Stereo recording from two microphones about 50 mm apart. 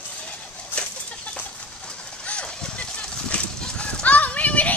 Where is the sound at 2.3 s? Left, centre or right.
Left.